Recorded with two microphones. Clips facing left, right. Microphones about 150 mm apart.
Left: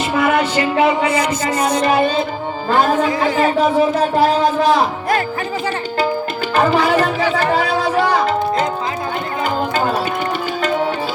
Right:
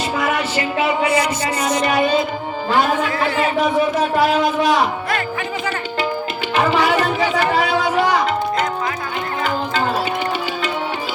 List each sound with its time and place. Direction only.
0.2 s music: 35° left (ahead or behind)
1.6 s speech: 30° left (ahead or behind)
6.6 s music: 35° left (ahead or behind)